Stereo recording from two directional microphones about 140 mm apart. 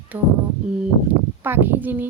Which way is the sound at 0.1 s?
20° right (ahead or behind).